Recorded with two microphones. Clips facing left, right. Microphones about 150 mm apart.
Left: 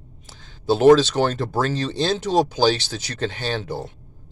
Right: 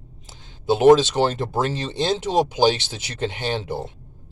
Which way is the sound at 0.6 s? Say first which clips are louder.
Even; 20° right (ahead or behind).